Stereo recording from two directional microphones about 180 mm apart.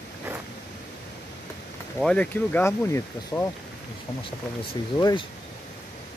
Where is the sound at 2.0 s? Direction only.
5° left (ahead or behind).